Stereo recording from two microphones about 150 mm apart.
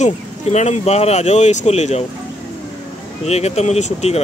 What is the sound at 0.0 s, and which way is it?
Speech, 50° left (ahead or behind).